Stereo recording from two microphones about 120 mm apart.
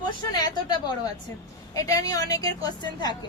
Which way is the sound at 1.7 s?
30° left (ahead or behind).